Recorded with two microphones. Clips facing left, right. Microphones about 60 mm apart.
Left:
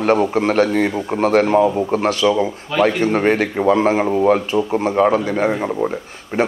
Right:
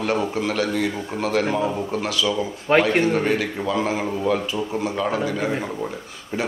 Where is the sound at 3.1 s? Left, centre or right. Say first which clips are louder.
Left 5 dB; left.